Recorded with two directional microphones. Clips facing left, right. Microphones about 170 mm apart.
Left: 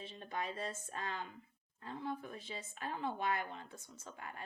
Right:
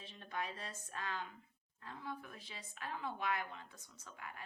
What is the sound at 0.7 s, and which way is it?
Speech, 25° left (ahead or behind).